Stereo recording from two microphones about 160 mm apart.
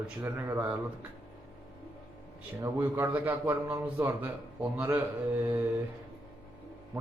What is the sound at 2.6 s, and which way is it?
A man's voice, 10° right (ahead or behind).